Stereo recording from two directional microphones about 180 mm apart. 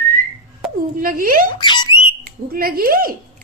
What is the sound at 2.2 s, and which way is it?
Speech, 55° right (ahead or behind).